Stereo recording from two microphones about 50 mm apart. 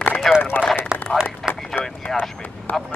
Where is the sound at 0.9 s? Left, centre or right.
Centre.